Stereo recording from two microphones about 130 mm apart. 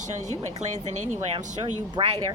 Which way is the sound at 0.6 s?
60° right (ahead or behind).